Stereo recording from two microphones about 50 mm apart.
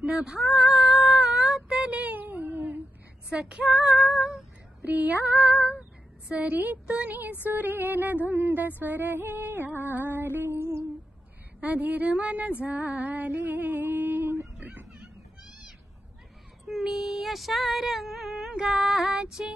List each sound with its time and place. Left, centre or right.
0.0 s female singing: right
0.7 s cat: right
0.9 s a sound: centre; by 2.8 s right
3.3 s female singing: centre
3.8 s speech: centre
4.1 s female singing: centre
4.8 s speech: right
6.4 s music: right
11.6 s speech: right
12.6 s female singing: right
14.6 s a sound: right
16.6 s a sound: centre
18.6 s female singing: centre